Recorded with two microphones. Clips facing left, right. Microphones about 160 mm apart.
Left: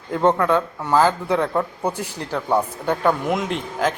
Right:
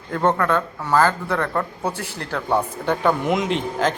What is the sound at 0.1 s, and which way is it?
A man's voice, 10° left (ahead or behind).